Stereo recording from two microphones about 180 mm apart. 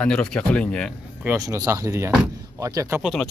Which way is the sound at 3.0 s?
Centre (ahead or behind).